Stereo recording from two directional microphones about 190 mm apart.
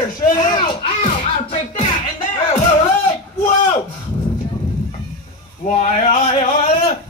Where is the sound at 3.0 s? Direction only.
25° left (ahead or behind).